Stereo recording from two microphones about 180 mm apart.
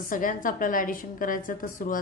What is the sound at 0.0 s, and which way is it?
A woman's voice, 50° left (ahead or behind).